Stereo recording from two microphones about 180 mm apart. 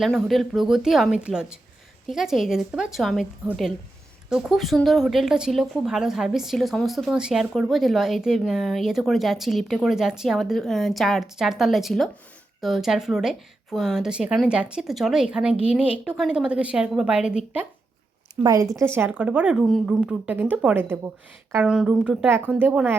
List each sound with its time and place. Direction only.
0.0 s a woman's voice: centre (ahead or behind)
18.4 s a woman's voice: 20° right (ahead or behind)